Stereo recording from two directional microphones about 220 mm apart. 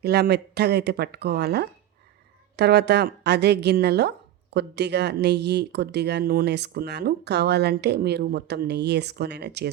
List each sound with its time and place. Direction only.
0.0 s speech: 45° right (ahead or behind)